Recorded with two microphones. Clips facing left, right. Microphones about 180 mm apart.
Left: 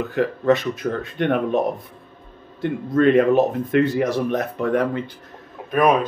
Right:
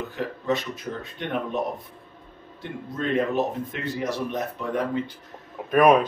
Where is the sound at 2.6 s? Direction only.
70° left (ahead or behind).